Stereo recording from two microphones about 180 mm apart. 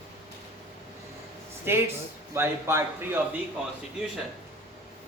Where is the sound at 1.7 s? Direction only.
15° right (ahead or behind).